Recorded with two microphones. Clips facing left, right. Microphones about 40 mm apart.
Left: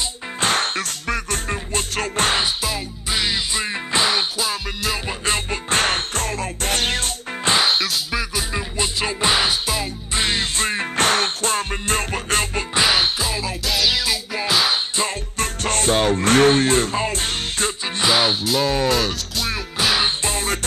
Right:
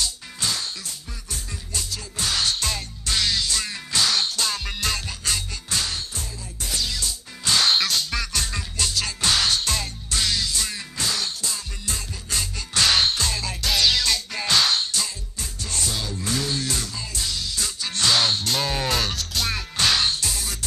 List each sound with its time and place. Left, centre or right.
0.4 s music: left
2.4 s music: centre
4.4 s music: centre
5.0 s music: left
7.7 s music: centre
10.1 s music: left
12.7 s music: centre
15.0 s music: left
17.8 s music: left
20.1 s music: left